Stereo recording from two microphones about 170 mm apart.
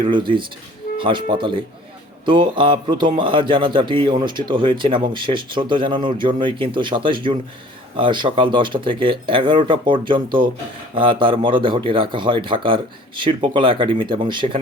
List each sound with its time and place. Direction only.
0.0 s speech: 30° right (ahead or behind)